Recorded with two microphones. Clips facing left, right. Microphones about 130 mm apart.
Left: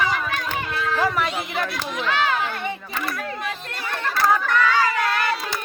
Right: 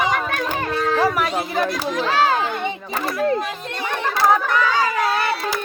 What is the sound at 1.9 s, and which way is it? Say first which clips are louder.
Speech: right 4 dB; 35° right (ahead or behind).